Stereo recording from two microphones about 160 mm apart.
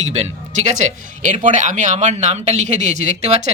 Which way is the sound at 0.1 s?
45° right (ahead or behind).